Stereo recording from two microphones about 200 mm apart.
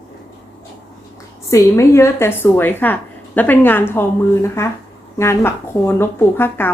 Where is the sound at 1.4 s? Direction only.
15° left (ahead or behind).